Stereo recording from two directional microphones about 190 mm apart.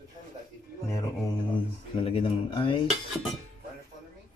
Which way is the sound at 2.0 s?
30° left (ahead or behind).